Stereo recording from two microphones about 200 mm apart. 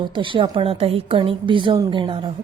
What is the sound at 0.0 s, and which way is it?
A woman's voice, 25° right (ahead or behind).